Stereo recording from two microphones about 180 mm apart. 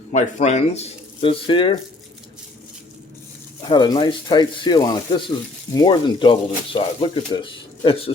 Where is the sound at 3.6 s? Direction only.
25° left (ahead or behind).